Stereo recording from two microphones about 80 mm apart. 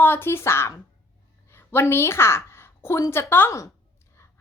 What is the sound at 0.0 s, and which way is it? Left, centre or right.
A woman's voice, left.